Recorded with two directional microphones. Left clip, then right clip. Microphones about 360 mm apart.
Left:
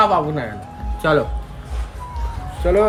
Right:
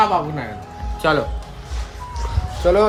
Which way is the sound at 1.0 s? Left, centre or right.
Centre.